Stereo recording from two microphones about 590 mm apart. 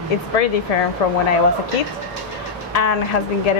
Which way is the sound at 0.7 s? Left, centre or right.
Left.